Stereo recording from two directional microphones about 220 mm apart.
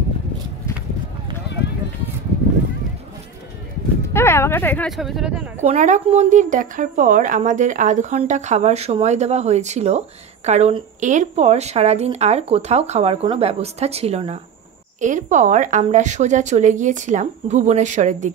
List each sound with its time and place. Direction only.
4.1 s speech: 10° left (ahead or behind)
5.6 s speech: 30° right (ahead or behind)